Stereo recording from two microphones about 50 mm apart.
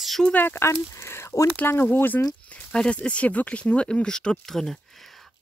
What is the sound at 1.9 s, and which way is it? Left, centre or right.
Speech, left.